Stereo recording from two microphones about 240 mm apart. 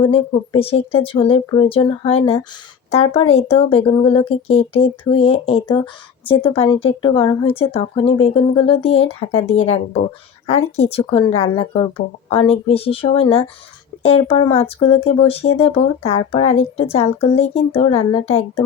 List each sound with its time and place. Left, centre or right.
0.0 s speech: left